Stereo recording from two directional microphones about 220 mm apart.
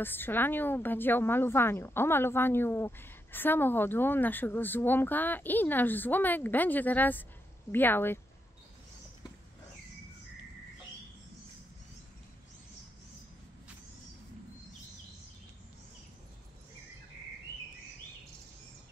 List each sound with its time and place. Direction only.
0.0 s a woman's voice: 10° left (ahead or behind)